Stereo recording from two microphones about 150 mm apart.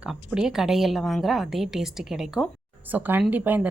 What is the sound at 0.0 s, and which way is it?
A woman's voice, 5° right (ahead or behind).